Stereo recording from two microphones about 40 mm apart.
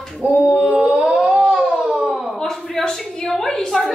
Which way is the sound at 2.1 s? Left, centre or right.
Centre.